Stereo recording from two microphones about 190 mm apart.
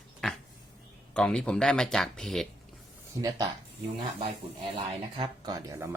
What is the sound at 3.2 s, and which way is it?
Speech, 20° right (ahead or behind).